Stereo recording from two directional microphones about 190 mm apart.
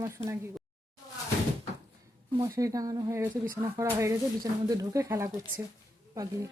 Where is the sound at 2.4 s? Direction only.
20° right (ahead or behind).